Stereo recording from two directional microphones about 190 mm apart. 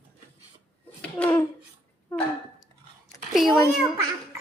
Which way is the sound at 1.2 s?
10° left (ahead or behind).